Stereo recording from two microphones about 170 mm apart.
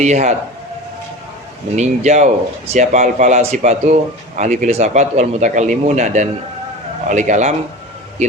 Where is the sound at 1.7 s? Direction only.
40° right (ahead or behind).